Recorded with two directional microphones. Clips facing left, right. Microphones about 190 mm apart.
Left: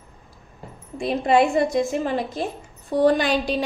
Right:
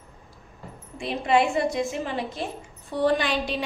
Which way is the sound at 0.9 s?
40° left (ahead or behind).